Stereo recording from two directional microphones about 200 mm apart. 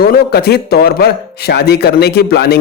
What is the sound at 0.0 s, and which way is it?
A man's voice, 50° left (ahead or behind).